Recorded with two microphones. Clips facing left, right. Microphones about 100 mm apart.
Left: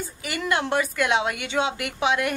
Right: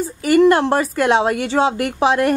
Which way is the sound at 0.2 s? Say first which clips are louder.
Right 14 dB; 40° right (ahead or behind).